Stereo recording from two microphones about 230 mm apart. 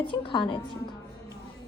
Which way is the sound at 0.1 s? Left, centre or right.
Left.